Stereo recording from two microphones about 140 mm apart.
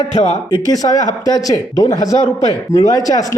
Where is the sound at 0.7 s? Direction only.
25° left (ahead or behind).